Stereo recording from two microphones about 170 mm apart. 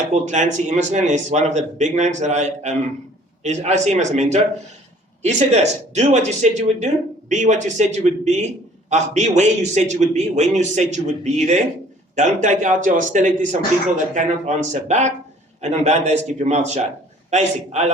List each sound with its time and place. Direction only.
0.1 s a man's voice: 45° right (ahead or behind)